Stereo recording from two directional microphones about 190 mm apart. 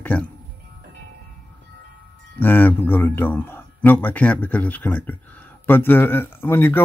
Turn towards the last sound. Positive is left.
turn(degrees=10)  # may be behind; listen again after turning